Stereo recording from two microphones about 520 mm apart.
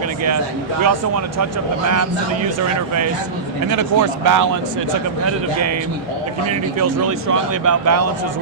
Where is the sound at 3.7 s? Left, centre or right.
Right.